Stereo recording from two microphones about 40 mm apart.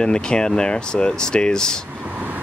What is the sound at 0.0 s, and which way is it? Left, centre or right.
Speech, left.